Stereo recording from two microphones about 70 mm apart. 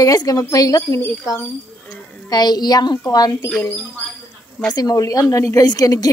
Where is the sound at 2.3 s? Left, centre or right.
Left.